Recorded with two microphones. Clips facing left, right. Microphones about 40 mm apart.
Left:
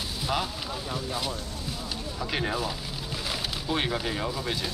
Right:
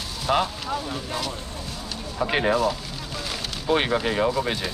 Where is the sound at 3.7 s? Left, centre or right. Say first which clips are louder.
Right 7 dB; right.